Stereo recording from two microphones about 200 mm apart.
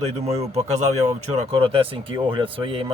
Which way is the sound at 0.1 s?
30° right (ahead or behind).